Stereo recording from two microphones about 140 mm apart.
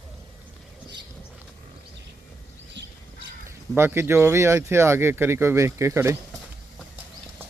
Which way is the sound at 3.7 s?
15° right (ahead or behind).